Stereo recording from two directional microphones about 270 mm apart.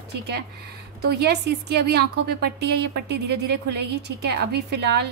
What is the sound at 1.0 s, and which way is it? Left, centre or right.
A woman's voice, right.